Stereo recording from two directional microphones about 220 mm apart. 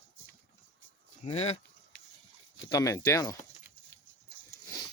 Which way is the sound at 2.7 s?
15° left (ahead or behind).